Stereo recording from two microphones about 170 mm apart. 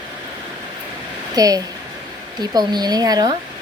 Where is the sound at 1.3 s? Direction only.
20° right (ahead or behind).